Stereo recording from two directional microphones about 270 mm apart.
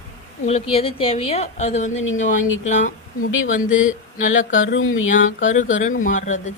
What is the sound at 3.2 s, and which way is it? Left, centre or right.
Speech, left.